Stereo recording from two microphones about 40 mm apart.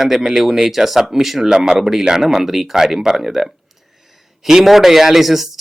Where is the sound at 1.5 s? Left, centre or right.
Centre.